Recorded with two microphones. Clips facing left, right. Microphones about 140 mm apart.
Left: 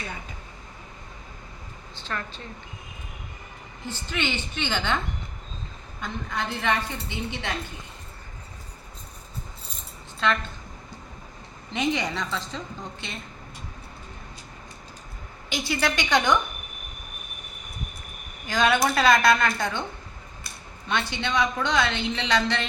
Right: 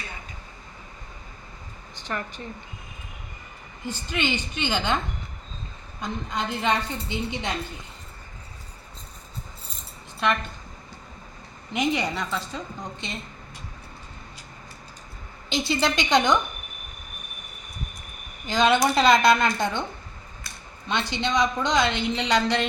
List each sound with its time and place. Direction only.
2.0 s speech: 15° right (ahead or behind)
3.8 s a woman's voice: 15° right (ahead or behind)
6.0 s a woman's voice: 20° right (ahead or behind)
10.2 s a woman's voice: 15° right (ahead or behind)
11.7 s a woman's voice: 10° right (ahead or behind)
15.4 s a woman's voice: 25° right (ahead or behind)
18.4 s a woman's voice: 20° right (ahead or behind)
20.8 s a woman's voice: 20° right (ahead or behind)